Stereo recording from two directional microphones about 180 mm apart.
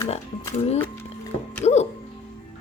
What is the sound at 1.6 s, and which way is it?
Speech, 35° left (ahead or behind).